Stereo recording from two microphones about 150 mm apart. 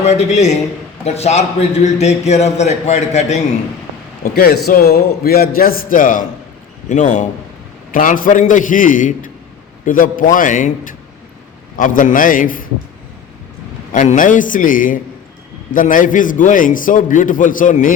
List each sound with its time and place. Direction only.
0.0 s a man's voice: 45° left (ahead or behind)
4.2 s a man's voice: 90° left; by 6.2 s 65° left (ahead or behind)
6.8 s a man's voice: 55° left (ahead or behind)
13.9 s a man's voice: 60° left (ahead or behind)